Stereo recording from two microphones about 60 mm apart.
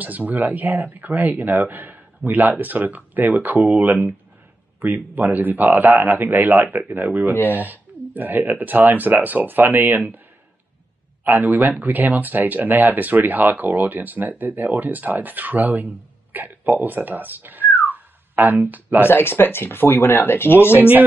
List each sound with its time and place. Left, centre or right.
0.0 s speech: right
11.2 s speech: right
17.8 s a sound: right
19.0 s speech: left